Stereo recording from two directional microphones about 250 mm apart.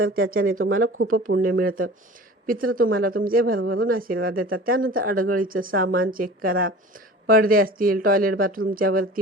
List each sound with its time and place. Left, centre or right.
0.0 s speech: right
1.3 s speech: right